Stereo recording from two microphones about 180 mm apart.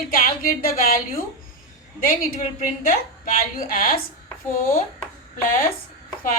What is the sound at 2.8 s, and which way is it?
Speech, 50° left (ahead or behind).